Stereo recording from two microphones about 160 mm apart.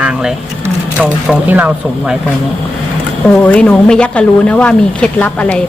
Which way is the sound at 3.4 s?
10° left (ahead or behind).